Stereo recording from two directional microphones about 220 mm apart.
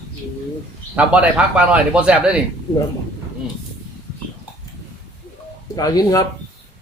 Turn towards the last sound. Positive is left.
turn(degrees=15)  # may be behind; listen again after turning